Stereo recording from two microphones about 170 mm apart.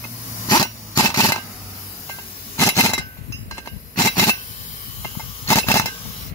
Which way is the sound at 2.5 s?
15° left (ahead or behind).